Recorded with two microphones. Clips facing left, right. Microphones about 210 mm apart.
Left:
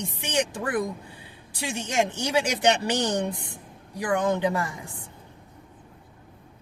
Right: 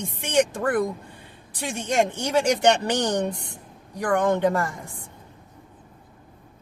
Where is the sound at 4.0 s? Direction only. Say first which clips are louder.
Right 3 dB; 50° right (ahead or behind).